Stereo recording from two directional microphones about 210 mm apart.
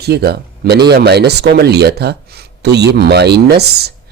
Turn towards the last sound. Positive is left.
turn(degrees=-50)  # may be behind; listen again after turning